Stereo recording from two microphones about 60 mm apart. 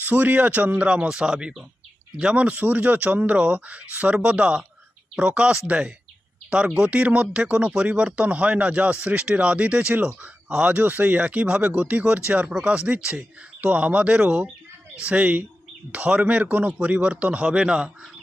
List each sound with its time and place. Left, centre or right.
0.0 s speech: right; by 18.1 s centre